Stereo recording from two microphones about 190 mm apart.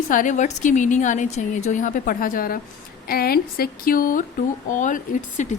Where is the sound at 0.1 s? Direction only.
45° left (ahead or behind).